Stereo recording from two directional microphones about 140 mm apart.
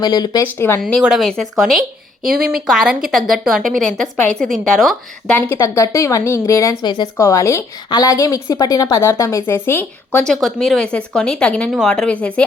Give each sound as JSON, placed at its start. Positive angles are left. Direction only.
{"t": 0.0, "sound": "a woman's voice", "side_deg": 30}
{"t": 0.4, "sound": "a woman's voice", "side_deg": 15}
{"t": 0.8, "sound": "a woman's voice", "side_deg": 5}
{"t": 2.2, "sound": "speech", "side_deg": -90}
{"t": 2.6, "sound": "a woman's voice", "side_deg": -5}
{"t": 5.5, "sound": "a woman's voice", "side_deg": 20}